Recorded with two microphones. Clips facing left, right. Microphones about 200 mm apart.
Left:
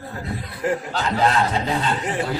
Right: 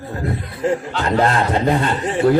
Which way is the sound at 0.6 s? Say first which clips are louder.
Right 4 dB; 25° right (ahead or behind).